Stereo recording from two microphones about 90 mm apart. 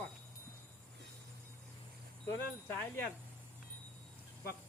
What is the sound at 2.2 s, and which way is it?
Speech, 30° left (ahead or behind).